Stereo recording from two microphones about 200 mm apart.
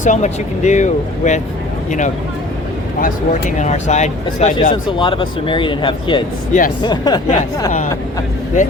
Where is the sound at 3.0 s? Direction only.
35° left (ahead or behind).